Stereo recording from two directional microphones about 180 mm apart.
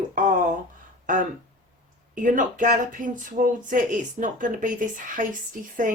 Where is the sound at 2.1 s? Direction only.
45° right (ahead or behind).